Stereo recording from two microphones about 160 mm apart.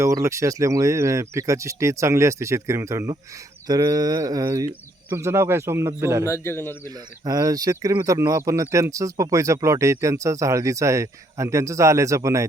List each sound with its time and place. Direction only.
0.0 s speech: 20° right (ahead or behind)
6.2 s a man's voice: 15° left (ahead or behind)
7.3 s speech: 20° right (ahead or behind)